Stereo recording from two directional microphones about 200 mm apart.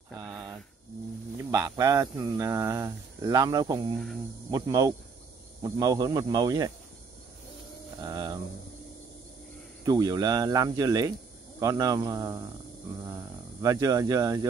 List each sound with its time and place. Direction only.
1.4 s speech: 15° right (ahead or behind)
8.0 s a sound: 20° right (ahead or behind)
9.8 s speech: 20° right (ahead or behind)